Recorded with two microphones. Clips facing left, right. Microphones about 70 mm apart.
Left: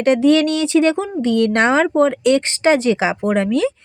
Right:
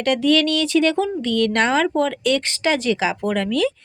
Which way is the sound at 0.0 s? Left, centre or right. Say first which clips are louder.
Left 4 dB; left.